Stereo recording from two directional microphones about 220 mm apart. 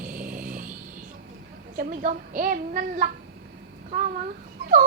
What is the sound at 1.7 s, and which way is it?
A child's voice, 40° right (ahead or behind).